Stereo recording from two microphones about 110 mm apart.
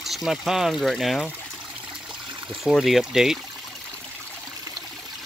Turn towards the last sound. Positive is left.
turn(degrees=-5)  # may be behind; listen again after turning